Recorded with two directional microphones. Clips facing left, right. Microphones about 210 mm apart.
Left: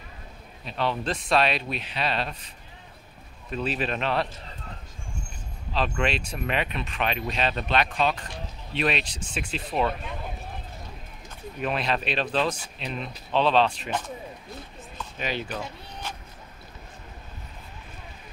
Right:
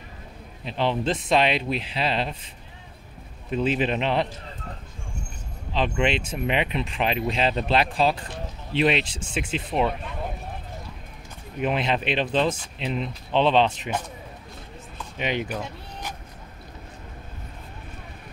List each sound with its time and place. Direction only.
0.7 s speech: 25° right (ahead or behind)
5.7 s speech: 20° right (ahead or behind)
11.6 s speech: 20° right (ahead or behind)
15.1 s speech: 20° right (ahead or behind)
15.4 s speech: 10° right (ahead or behind)